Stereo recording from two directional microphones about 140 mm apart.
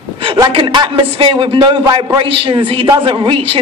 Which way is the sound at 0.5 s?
40° right (ahead or behind).